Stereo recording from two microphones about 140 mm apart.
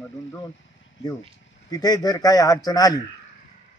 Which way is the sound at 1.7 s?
30° left (ahead or behind).